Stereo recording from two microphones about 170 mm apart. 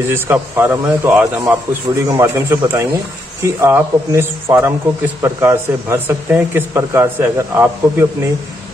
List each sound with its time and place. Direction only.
0.1 s speech: 15° right (ahead or behind)